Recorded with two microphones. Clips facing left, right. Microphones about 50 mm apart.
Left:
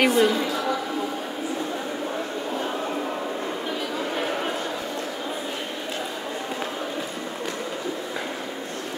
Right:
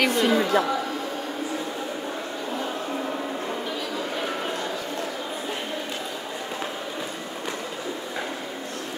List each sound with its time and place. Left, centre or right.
0.0 s a woman's voice: left
0.4 s speech: right